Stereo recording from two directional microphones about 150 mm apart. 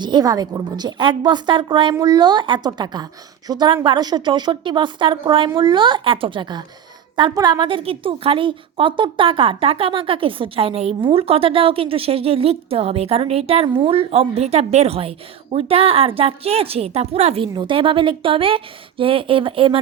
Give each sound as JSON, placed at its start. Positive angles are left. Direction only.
{"t": 0.0, "sound": "a woman's voice", "side_deg": -30}
{"t": 17.5, "sound": "a woman's voice", "side_deg": -30}